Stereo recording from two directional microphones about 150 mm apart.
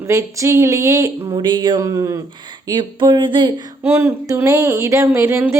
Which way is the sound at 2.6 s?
30° right (ahead or behind).